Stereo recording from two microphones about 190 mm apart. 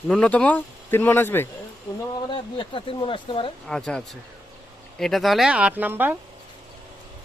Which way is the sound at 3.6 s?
5° left (ahead or behind).